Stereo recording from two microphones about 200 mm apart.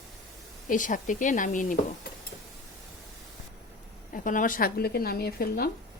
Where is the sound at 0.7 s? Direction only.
40° left (ahead or behind).